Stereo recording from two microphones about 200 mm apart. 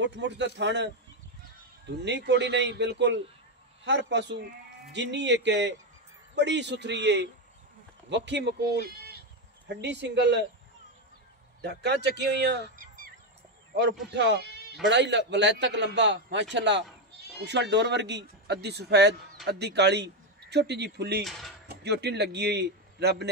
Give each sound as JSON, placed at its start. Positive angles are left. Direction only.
{"t": 0.0, "sound": "speech", "side_deg": -60}
{"t": 1.9, "sound": "speech", "side_deg": -60}
{"t": 9.7, "sound": "speech", "side_deg": -60}
{"t": 11.6, "sound": "honk", "side_deg": -60}
{"t": 14.1, "sound": "speech", "side_deg": -60}
{"t": 21.2, "sound": "speech", "side_deg": 0}
{"t": 21.6, "sound": "a man's voice", "side_deg": -55}